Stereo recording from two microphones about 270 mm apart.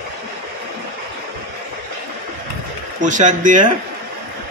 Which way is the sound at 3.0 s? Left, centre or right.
Right.